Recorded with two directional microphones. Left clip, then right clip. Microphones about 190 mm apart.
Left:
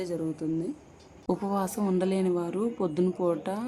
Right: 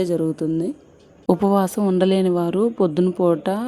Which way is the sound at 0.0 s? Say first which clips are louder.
Right 11 dB; 40° right (ahead or behind).